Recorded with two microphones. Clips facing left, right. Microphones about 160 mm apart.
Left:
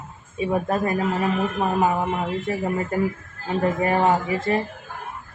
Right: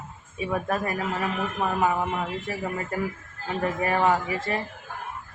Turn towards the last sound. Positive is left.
turn(degrees=25)  # may be behind; listen again after turning